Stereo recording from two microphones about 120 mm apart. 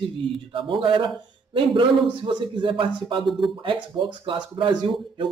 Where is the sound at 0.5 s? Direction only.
45° right (ahead or behind).